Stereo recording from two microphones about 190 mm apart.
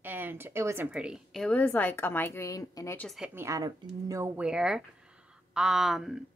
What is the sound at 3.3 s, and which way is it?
A woman's voice, 15° right (ahead or behind).